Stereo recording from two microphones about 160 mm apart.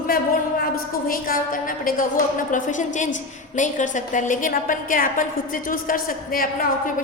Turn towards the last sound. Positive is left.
turn(degrees=65)  # may be behind; listen again after turning